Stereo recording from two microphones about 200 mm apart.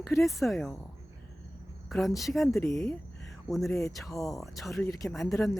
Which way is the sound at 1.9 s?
Centre (ahead or behind).